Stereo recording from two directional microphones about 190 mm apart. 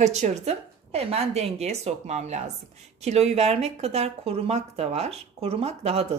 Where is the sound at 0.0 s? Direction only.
35° right (ahead or behind).